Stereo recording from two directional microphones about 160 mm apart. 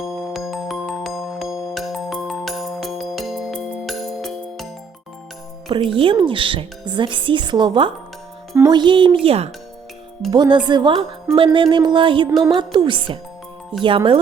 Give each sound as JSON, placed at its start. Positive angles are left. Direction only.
{"t": 0.3, "sound": "music", "side_deg": 0}
{"t": 5.6, "sound": "speech", "side_deg": -30}